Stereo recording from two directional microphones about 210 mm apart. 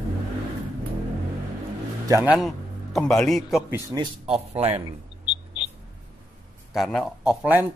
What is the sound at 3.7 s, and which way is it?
Speech, 15° right (ahead or behind).